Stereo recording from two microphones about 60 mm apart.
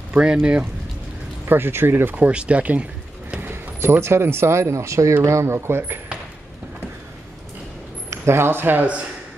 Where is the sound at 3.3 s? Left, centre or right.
Right.